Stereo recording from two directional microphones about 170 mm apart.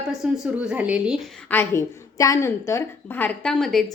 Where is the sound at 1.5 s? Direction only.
15° left (ahead or behind).